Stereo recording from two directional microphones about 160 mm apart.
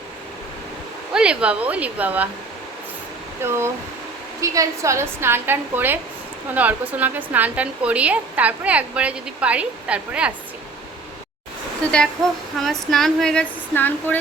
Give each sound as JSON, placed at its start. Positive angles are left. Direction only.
{"t": 1.1, "sound": "speech", "side_deg": -5}
{"t": 3.4, "sound": "speech", "side_deg": -15}
{"t": 11.8, "sound": "speech", "side_deg": 5}